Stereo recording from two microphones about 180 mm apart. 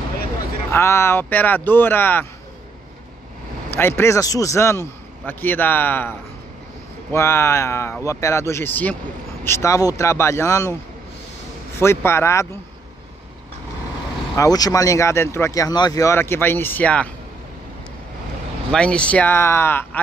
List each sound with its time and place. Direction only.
0.7 s speech: 15° left (ahead or behind)
3.7 s speech: 15° left (ahead or behind)
11.8 s speech: 15° left (ahead or behind)
14.3 s speech: 20° left (ahead or behind)
18.7 s speech: 5° left (ahead or behind)